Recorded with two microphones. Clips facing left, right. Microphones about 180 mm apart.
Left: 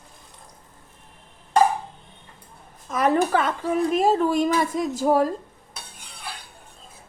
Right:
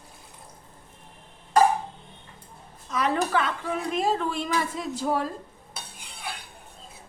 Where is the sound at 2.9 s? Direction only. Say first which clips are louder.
Left 5 dB; 50° left (ahead or behind).